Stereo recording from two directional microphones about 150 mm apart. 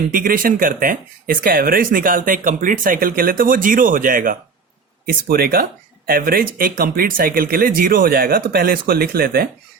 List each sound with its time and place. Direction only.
0.2 s speech: 70° right (ahead or behind)
5.0 s speech: 85° right